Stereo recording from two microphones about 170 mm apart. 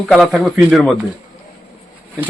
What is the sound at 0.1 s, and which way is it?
Speech, centre (ahead or behind).